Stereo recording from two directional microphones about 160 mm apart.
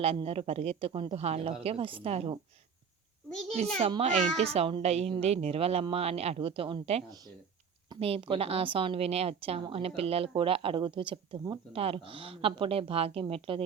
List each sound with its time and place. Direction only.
0.0 s a woman's voice: 40° right (ahead or behind)
3.8 s a woman's voice: 40° right (ahead or behind)